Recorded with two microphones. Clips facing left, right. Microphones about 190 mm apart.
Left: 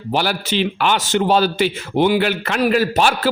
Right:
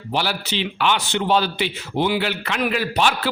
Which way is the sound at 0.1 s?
45° left (ahead or behind).